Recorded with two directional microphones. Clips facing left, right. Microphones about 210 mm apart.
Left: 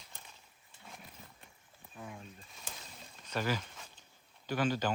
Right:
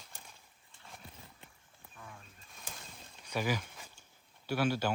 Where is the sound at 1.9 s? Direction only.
20° left (ahead or behind).